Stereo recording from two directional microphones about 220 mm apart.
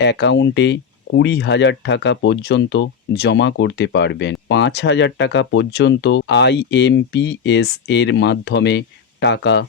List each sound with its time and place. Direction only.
0.0 s speech: 50° left (ahead or behind)